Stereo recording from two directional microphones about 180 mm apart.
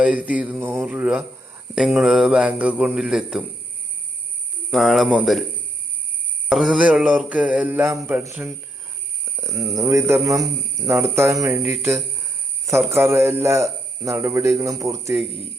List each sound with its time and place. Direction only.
0.0 s a man's voice: 5° right (ahead or behind)
4.7 s a man's voice: centre (ahead or behind)
6.5 s a man's voice: centre (ahead or behind)